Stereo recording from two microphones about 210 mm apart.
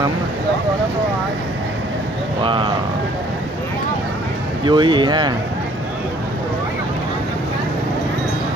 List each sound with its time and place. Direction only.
2.4 s speech: 20° right (ahead or behind)
4.6 s speech: 20° right (ahead or behind)